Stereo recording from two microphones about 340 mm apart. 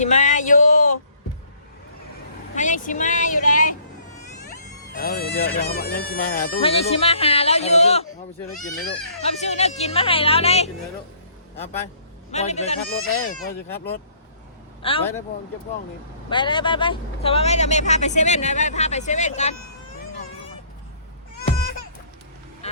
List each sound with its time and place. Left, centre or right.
0.0 s a sound: left
2.6 s music: left
4.9 s speech: left
9.2 s a woman's voice: centre
12.3 s speech: centre
13.1 s speech: left
13.4 s speech: left
14.8 s a woman's voice: centre
16.3 s speech: centre
22.6 s vehicle: centre